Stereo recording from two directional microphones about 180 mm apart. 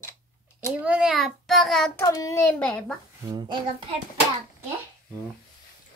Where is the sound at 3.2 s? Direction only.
25° right (ahead or behind).